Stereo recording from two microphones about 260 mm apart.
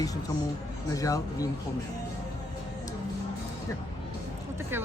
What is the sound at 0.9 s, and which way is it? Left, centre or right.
Speech, centre.